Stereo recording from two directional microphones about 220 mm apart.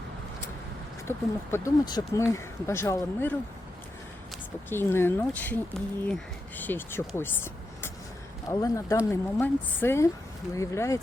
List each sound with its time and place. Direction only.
1.0 s speech: 10° left (ahead or behind)
4.7 s speech: 10° left (ahead or behind)